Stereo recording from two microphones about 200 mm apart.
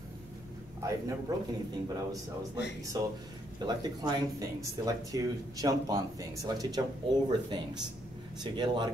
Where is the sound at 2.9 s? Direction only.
20° right (ahead or behind).